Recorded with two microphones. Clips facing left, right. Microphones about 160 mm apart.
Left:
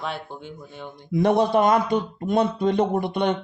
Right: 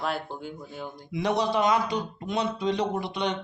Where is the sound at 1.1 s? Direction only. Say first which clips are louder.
Left 7 dB; 50° left (ahead or behind).